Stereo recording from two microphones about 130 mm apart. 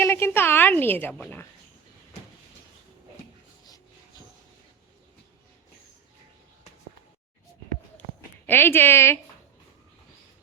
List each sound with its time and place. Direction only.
0.0 s a woman's voice: 20° left (ahead or behind)
8.4 s a woman's voice: 15° left (ahead or behind)